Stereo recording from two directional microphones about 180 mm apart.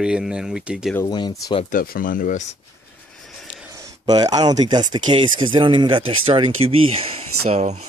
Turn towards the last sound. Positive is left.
turn(degrees=-40)  # may be behind; listen again after turning